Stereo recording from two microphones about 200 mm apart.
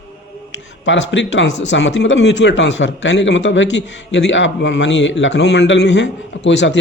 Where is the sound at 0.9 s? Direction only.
65° left (ahead or behind).